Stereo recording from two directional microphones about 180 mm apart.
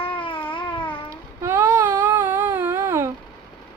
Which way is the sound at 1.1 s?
15° right (ahead or behind).